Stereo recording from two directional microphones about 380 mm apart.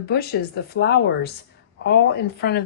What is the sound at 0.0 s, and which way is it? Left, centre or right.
A woman's voice, left.